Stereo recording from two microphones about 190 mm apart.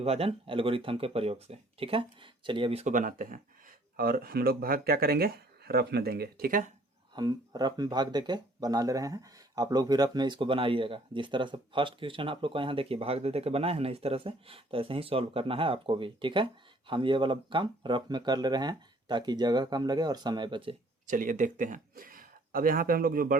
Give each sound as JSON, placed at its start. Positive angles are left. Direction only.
{"t": 0.0, "sound": "speech", "side_deg": -30}
{"t": 7.1, "sound": "speech", "side_deg": -20}
{"t": 21.1, "sound": "speech", "side_deg": -45}